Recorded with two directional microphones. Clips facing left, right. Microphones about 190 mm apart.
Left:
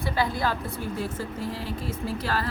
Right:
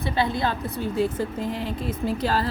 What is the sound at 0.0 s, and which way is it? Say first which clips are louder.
A woman's voice: right 2 dB; 25° right (ahead or behind).